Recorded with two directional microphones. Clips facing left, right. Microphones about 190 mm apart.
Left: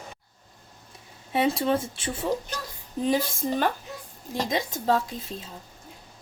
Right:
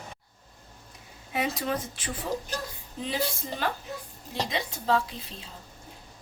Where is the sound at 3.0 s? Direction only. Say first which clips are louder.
Left 6 dB; 45° left (ahead or behind).